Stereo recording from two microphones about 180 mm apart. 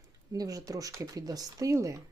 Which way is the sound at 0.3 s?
20° right (ahead or behind).